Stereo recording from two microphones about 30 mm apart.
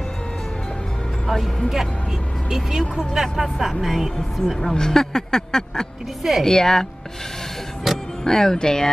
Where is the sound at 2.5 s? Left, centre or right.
Centre.